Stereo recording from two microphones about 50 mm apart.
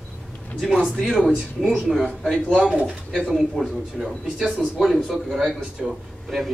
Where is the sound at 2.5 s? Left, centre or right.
Centre.